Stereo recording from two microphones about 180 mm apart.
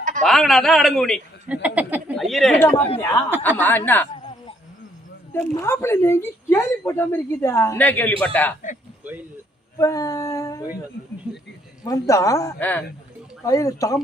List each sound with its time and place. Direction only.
0.2 s a man's voice: centre (ahead or behind)
3.0 s a woman's voice: 15° left (ahead or behind)
5.3 s a woman's voice: 15° left (ahead or behind)
9.7 s a woman's voice: 20° left (ahead or behind)
11.3 s speech: 5° right (ahead or behind)
11.8 s a woman's voice: 20° left (ahead or behind)